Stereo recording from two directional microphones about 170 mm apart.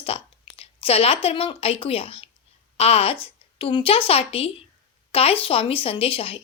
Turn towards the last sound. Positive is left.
turn(degrees=35)  # may be behind; listen again after turning